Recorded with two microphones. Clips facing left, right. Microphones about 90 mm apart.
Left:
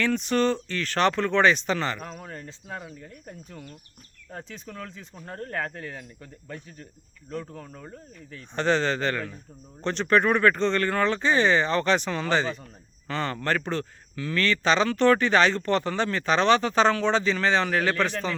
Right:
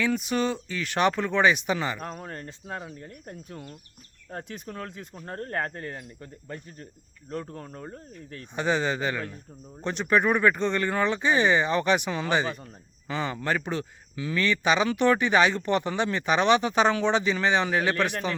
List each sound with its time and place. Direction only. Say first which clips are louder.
0.0 s a man's voice: left 2 dB; 10° right (ahead or behind)
2.0 s speech: right 2 dB; 35° right (ahead or behind)
2.3 s speech: right 1 dB; 50° right (ahead or behind)
2.6 s speech: right 2 dB; 35° right (ahead or behind)
4.3 s speech: right 2 dB; 50° right (ahead or behind)
5.2 s speech: right 1 dB; 35° right (ahead or behind)
7.3 s speech: right 1 dB; 40° right (ahead or behind)
8.5 s a man's voice: left 2 dB; 10° right (ahead or behind)